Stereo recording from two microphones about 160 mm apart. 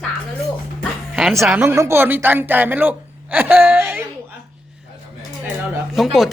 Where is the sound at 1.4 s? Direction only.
15° right (ahead or behind).